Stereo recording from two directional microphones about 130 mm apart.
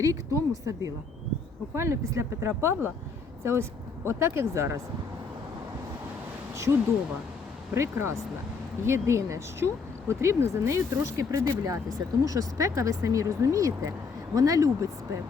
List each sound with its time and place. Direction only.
0.0 s speech: 25° right (ahead or behind)
7.7 s speech: 20° right (ahead or behind)